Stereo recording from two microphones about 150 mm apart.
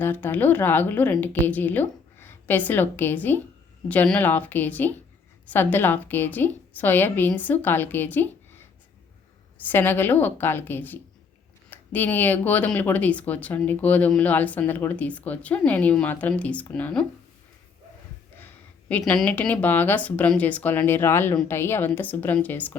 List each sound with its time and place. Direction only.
0.0 s speech: 15° left (ahead or behind)
18.3 s speech: 10° left (ahead or behind)